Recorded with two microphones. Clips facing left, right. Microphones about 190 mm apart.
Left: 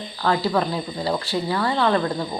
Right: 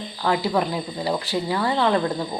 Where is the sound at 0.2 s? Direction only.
15° right (ahead or behind).